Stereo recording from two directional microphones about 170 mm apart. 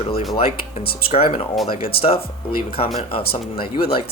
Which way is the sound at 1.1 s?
35° left (ahead or behind).